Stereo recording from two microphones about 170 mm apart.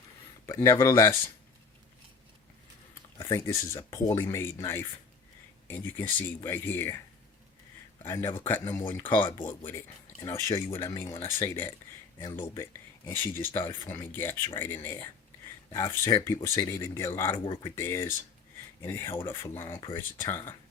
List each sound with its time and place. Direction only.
0.4 s speech: 20° left (ahead or behind)
3.2 s speech: 15° left (ahead or behind)
8.0 s speech: 15° left (ahead or behind)
8.6 s speech: 25° left (ahead or behind)
10.2 s speech: 15° left (ahead or behind)